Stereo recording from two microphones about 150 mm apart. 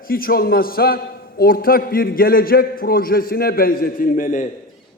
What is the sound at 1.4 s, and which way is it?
A man's voice, 75° left (ahead or behind).